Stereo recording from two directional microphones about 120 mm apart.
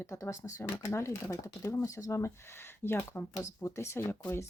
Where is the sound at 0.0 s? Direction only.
25° left (ahead or behind).